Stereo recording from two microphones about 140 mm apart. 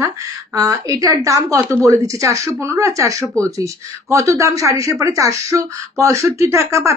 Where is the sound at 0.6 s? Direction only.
25° right (ahead or behind).